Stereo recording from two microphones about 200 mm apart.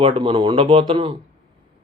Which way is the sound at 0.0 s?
25° right (ahead or behind).